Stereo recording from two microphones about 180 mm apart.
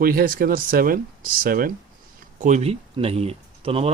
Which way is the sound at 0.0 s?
55° right (ahead or behind).